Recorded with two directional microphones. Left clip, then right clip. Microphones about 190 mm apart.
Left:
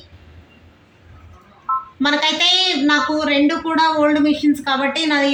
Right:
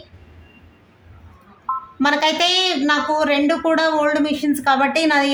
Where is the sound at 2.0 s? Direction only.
65° right (ahead or behind).